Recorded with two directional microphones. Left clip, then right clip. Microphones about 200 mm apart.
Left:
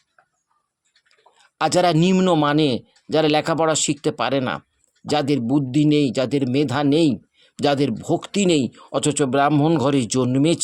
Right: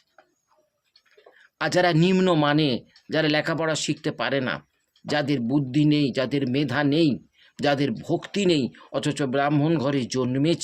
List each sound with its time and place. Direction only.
1.4 s speech: 45° left (ahead or behind)